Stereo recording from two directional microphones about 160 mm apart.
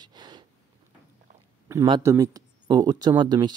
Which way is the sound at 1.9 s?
20° right (ahead or behind).